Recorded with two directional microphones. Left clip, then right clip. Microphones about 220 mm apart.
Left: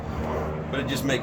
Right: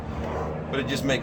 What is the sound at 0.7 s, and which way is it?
Speech, centre (ahead or behind).